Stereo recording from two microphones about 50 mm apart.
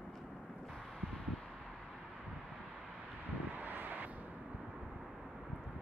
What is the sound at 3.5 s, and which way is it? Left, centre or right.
Vehicle, right.